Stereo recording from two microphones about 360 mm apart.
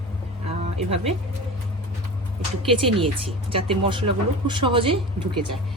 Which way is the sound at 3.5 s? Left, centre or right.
Centre.